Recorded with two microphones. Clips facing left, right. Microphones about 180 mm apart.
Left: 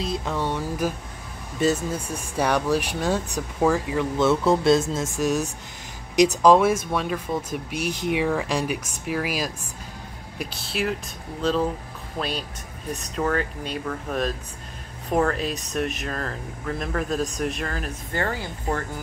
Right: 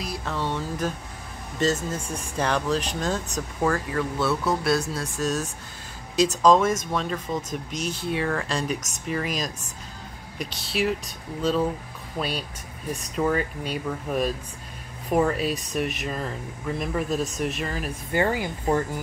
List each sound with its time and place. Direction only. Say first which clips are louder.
0.0 s music: left 3 dB; 20° left (ahead or behind)
1.6 s speech: left 2 dB; 10° left (ahead or behind)
4.2 s speech: left 7 dB; 25° left (ahead or behind); by 11.0 s centre (ahead or behind)
12.2 s speech: even; 5° right (ahead or behind)